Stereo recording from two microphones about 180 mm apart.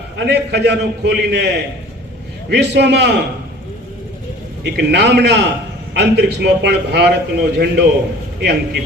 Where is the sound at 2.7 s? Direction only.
70° right (ahead or behind).